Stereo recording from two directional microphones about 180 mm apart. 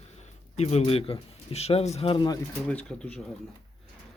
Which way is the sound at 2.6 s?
5° left (ahead or behind).